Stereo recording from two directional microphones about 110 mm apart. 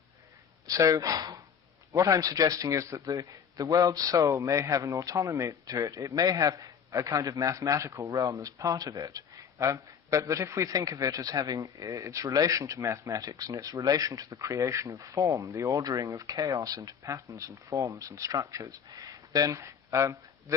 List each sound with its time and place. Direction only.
0.7 s a man's voice: 30° right (ahead or behind)